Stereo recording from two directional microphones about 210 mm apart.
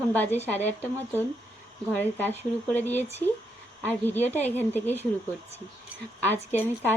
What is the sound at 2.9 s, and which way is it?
Speech, 30° left (ahead or behind).